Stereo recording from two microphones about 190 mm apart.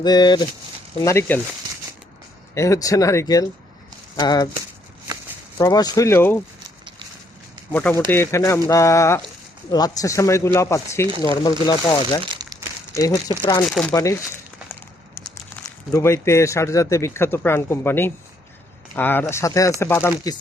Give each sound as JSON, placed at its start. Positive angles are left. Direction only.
{"t": 0.0, "sound": "a man's voice", "side_deg": 20}
{"t": 2.6, "sound": "a man's voice", "side_deg": 15}
{"t": 5.5, "sound": "a man's voice", "side_deg": 20}
{"t": 7.7, "sound": "a man's voice", "side_deg": 10}
{"t": 12.3, "sound": "crumpling", "side_deg": -20}
{"t": 12.9, "sound": "a man's voice", "side_deg": 20}
{"t": 13.7, "sound": "speech", "side_deg": 0}
{"t": 13.9, "sound": "a man's voice", "side_deg": 15}
{"t": 14.7, "sound": "crumpling", "side_deg": 10}
{"t": 15.6, "sound": "a man's voice", "side_deg": 15}